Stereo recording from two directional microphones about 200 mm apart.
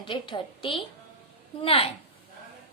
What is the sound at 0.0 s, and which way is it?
A woman's voice, 25° left (ahead or behind).